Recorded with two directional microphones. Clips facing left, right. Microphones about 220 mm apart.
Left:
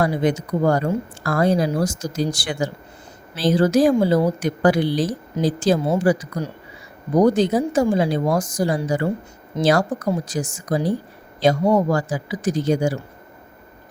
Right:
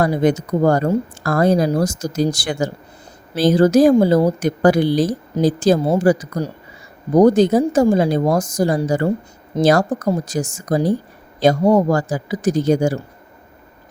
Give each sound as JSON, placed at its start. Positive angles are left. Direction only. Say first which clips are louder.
{"t": 0.0, "sound": "speech", "louder": "right 3 dB", "side_deg": -45}